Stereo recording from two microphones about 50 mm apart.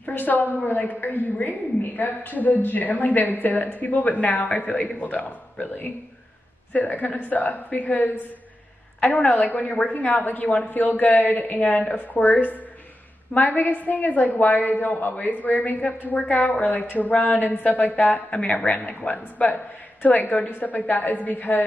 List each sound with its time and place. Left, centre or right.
0.0 s a woman's voice: left
9.3 s a woman's voice: left
18.7 s a woman's voice: left